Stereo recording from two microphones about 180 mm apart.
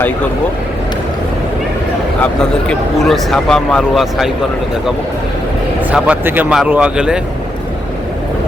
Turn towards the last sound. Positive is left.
turn(degrees=-5)  # may be behind; listen again after turning